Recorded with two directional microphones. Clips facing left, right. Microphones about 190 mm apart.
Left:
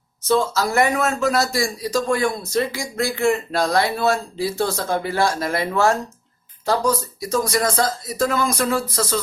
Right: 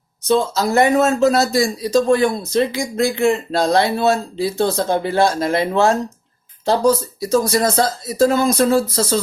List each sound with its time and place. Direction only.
0.3 s a man's voice: 20° right (ahead or behind)